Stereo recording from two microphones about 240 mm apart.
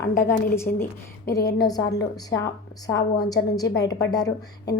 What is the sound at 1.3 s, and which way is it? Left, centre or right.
A woman's voice, centre.